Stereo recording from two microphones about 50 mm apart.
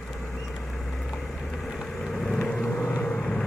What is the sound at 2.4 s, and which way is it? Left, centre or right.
Vehicle, centre.